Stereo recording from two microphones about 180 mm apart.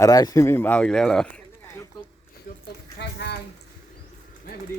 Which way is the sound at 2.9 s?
65° left (ahead or behind).